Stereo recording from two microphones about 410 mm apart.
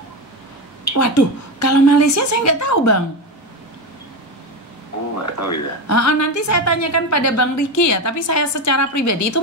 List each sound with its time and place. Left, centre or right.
0.9 s a woman's voice: left
5.2 s a woman's voice: left